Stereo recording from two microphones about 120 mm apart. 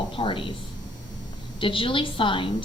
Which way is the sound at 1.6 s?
45° left (ahead or behind).